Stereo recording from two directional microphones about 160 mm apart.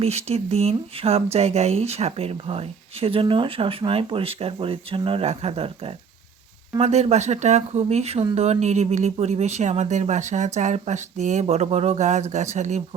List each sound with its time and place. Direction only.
0.0 s speech: 40° right (ahead or behind)